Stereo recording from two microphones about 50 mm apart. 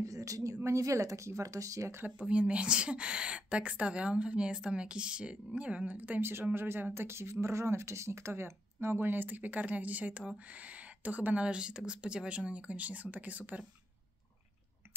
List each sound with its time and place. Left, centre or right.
0.0 s a sound: right
0.7 s speech: right
2.0 s a woman's voice: right
6.5 s a woman's voice: right
8.8 s speech: right
11.4 s a woman's voice: centre